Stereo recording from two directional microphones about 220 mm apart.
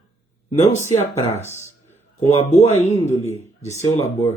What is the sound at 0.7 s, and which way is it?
Speech, 30° left (ahead or behind).